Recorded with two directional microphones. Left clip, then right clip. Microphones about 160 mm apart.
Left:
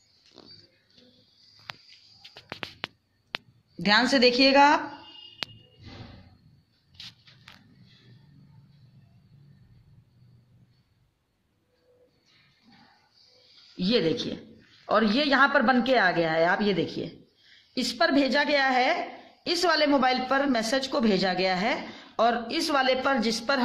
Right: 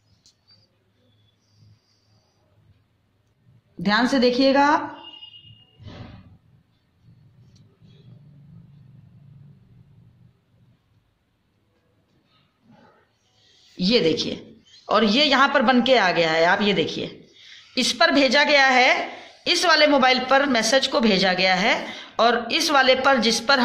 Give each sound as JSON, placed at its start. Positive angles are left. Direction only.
{"t": 3.8, "sound": "a woman's voice", "side_deg": 15}
{"t": 13.7, "sound": "speech", "side_deg": 25}